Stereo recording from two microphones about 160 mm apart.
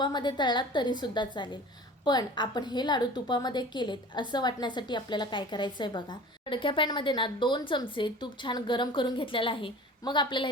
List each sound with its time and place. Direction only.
0.0 s a woman's voice: 30° left (ahead or behind)